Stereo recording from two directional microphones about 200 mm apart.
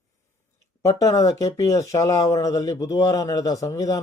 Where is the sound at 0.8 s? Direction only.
15° left (ahead or behind).